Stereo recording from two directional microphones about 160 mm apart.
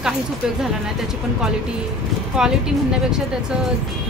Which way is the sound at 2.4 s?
5° right (ahead or behind).